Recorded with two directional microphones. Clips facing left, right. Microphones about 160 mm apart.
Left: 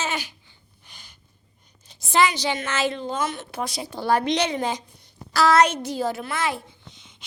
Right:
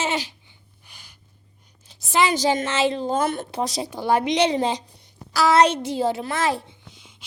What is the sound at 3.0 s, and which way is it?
Speech, 50° right (ahead or behind).